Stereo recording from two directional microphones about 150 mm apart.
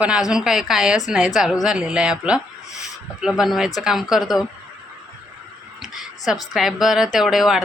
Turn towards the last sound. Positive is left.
turn(degrees=0)  # may be behind; listen again after turning